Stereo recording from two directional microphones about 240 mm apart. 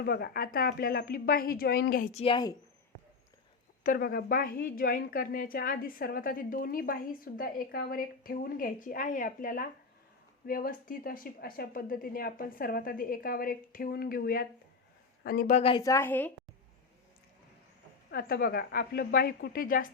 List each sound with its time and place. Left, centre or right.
0.0 s a woman's voice: left
2.2 s speech: centre
3.8 s a woman's voice: left; by 16.3 s centre
18.1 s a woman's voice: left